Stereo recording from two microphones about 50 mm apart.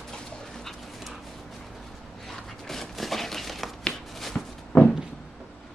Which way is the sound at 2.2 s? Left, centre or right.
Centre.